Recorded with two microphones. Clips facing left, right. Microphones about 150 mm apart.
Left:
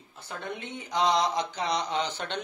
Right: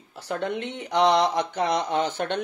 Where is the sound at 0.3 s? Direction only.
80° right.